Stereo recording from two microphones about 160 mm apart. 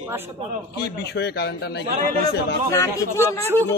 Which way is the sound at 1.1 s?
90° left.